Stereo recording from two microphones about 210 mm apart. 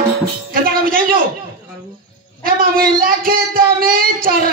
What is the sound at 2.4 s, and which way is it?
Speech, 45° right (ahead or behind).